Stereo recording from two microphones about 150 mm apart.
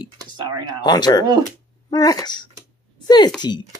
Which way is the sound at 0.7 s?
30° left (ahead or behind).